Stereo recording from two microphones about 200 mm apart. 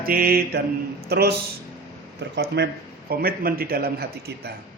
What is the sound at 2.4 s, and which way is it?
A man's voice, 55° right (ahead or behind).